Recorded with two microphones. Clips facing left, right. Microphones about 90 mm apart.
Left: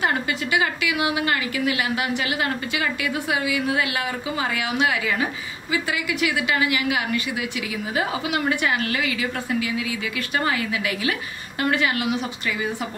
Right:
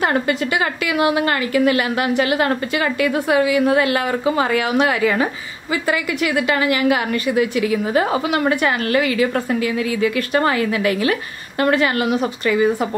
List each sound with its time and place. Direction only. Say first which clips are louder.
0.0 s a woman's voice: right 5 dB; 45° right (ahead or behind)